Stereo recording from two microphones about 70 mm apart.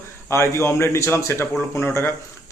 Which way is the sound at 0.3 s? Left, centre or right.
Left.